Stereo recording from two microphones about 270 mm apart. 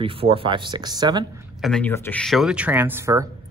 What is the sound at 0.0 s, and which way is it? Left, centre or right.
Speech, centre.